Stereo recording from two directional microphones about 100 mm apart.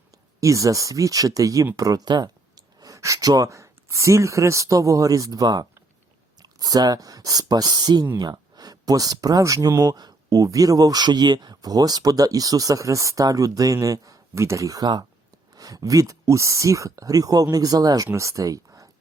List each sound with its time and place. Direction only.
0.3 s speech: 35° right (ahead or behind)